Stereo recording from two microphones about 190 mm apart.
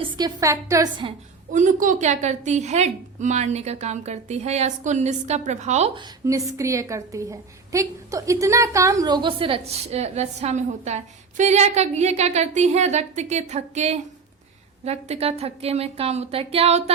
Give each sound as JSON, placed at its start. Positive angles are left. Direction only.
{"t": 0.0, "sound": "a woman's voice", "side_deg": -20}
{"t": 1.5, "sound": "a woman's voice", "side_deg": -40}
{"t": 6.2, "sound": "a woman's voice", "side_deg": -15}